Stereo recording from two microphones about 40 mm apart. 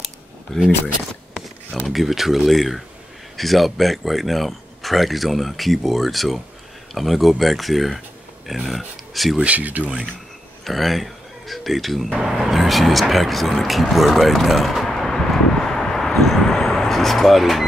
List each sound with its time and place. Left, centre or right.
0.5 s speech: centre
1.9 s speech: centre
9.4 s speech: right
10.6 s speech: centre
15.0 s vehicle: centre